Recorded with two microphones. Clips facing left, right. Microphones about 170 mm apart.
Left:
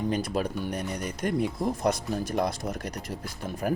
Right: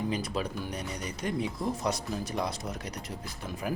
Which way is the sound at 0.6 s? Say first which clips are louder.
Left 5 dB; 50° left (ahead or behind).